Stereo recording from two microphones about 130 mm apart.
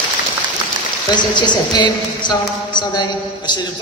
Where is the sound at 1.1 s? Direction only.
35° left (ahead or behind).